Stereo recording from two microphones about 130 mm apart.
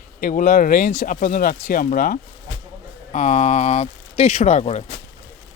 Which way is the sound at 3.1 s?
60° left (ahead or behind).